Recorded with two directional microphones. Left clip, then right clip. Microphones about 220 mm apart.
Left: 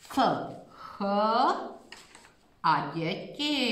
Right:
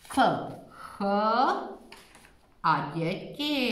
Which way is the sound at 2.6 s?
Centre (ahead or behind).